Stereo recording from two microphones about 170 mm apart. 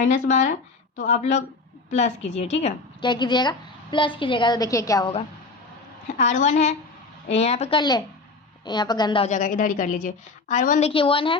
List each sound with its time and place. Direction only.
0.0 s a woman's voice: 45° left (ahead or behind)
3.1 s a woman's voice: 25° left (ahead or behind)
6.1 s a woman's voice: 45° left (ahead or behind)
7.8 s a woman's voice: 25° left (ahead or behind)
9.2 s a woman's voice: 45° left (ahead or behind); by 11.3 s 30° left (ahead or behind)